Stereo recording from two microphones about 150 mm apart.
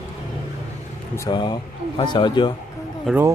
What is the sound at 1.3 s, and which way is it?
Speech, 30° left (ahead or behind).